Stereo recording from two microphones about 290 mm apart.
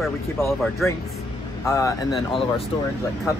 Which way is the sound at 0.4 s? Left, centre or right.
Centre.